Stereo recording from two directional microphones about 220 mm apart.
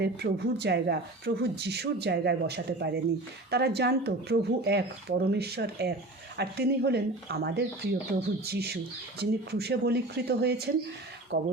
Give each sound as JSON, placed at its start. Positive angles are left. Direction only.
{"t": 0.0, "sound": "speech", "side_deg": -50}
{"t": 11.3, "sound": "speech", "side_deg": -60}